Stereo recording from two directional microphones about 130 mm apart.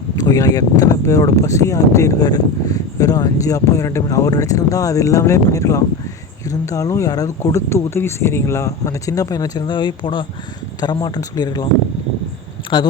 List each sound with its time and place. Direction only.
0.2 s speech: 25° left (ahead or behind)
12.7 s speech: 35° left (ahead or behind)